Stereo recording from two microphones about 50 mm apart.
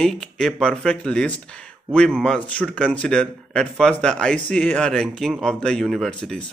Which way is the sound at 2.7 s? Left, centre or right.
Left.